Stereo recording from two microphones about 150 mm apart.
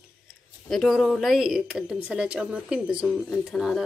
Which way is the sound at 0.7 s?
Centre (ahead or behind).